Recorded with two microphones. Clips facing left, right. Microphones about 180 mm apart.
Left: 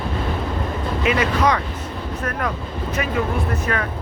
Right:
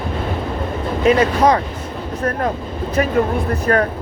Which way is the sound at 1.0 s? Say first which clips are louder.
Right 6 dB; 35° right (ahead or behind).